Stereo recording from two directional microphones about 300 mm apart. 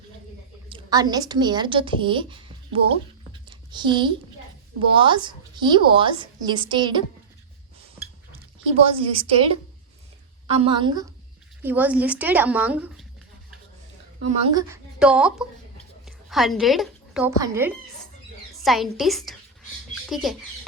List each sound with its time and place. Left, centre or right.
0.7 s a woman's voice: centre
3.4 s a sound: centre
4.9 s a woman's voice: centre
8.3 s speech: right
10.5 s a woman's voice: centre
14.3 s a woman's voice: centre